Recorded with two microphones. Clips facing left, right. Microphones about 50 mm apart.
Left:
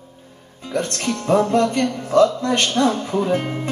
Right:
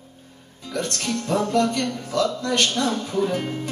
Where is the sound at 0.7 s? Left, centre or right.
Left.